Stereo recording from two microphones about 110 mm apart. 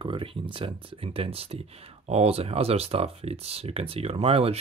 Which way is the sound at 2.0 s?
70° right (ahead or behind).